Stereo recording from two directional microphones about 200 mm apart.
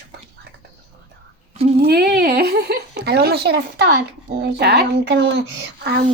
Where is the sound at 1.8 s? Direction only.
55° right (ahead or behind).